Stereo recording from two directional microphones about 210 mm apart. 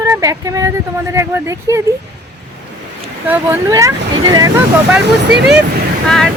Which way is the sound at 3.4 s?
15° right (ahead or behind).